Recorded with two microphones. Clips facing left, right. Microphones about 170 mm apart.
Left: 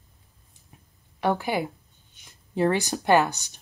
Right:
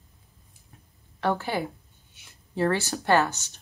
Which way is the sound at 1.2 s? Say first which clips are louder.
Left 2 dB; 15° left (ahead or behind).